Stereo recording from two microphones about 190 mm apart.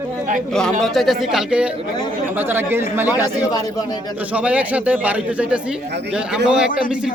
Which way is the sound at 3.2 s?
20° left (ahead or behind).